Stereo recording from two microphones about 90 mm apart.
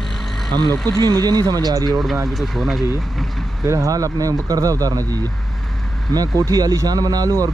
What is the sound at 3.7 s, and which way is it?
Speech, 35° right (ahead or behind).